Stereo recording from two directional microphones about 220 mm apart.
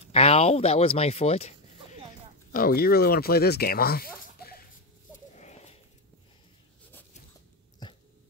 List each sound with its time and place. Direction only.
0.1 s speech: 30° left (ahead or behind)
2.5 s speech: 40° left (ahead or behind)
5.1 s a sound: 30° left (ahead or behind)